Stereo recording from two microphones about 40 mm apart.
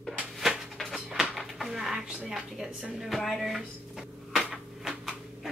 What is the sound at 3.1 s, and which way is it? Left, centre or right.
Speech, centre.